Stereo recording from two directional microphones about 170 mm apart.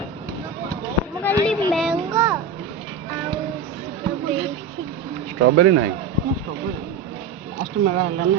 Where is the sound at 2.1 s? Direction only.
20° right (ahead or behind).